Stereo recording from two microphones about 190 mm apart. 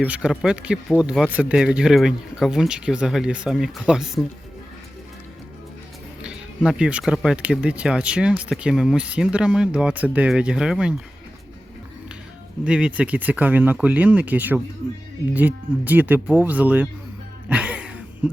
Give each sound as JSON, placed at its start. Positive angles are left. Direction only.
{"t": 0.0, "sound": "speech", "side_deg": -5}
{"t": 6.2, "sound": "speech", "side_deg": -5}
{"t": 12.6, "sound": "speech", "side_deg": -5}
{"t": 17.5, "sound": "music", "side_deg": -5}